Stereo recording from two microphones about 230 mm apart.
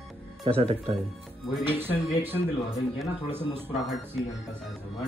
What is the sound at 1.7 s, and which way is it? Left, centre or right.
Speech, centre.